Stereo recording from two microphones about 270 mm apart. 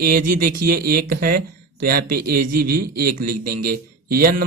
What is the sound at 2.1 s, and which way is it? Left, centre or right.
A man's voice, right.